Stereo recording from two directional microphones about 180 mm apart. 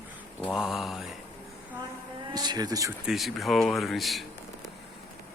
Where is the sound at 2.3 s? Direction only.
20° right (ahead or behind).